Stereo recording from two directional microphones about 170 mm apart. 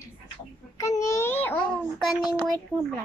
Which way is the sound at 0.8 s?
20° left (ahead or behind).